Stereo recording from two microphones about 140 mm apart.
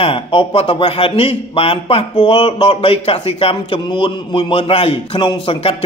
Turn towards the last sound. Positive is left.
turn(degrees=40)  # may be behind; listen again after turning